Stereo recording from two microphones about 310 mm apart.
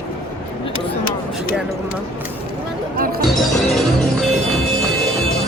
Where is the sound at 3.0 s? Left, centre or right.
Right.